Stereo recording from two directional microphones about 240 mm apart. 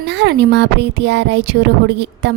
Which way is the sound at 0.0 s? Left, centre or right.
Right.